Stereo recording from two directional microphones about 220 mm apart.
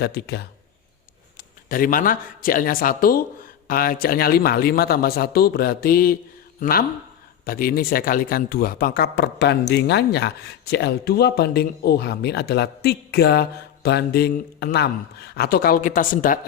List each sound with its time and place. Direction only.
0.0 s a man's voice: 45° left (ahead or behind)